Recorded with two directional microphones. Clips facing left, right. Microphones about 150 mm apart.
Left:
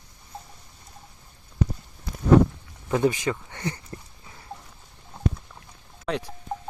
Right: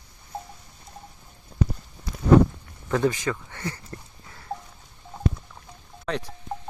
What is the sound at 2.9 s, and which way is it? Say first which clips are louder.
Speech: left 1 dB; 20° left (ahead or behind).